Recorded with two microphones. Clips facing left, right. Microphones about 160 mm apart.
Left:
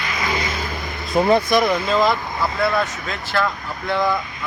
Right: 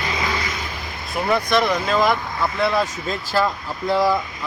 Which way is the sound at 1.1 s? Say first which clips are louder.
Left 5 dB; 20° left (ahead or behind).